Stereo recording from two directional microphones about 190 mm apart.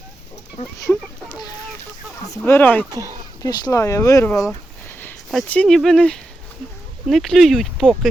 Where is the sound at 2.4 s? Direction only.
10° left (ahead or behind).